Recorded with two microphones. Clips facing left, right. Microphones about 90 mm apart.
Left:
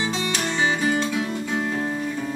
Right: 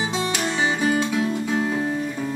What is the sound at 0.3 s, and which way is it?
Music, 15° right (ahead or behind).